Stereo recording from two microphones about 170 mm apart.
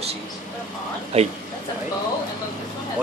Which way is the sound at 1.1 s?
35° right (ahead or behind).